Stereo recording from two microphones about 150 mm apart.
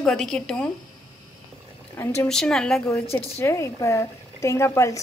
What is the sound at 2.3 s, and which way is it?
Speech, 5° left (ahead or behind).